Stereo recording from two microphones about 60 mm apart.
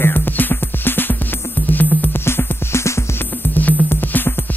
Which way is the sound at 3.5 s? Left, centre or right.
Left.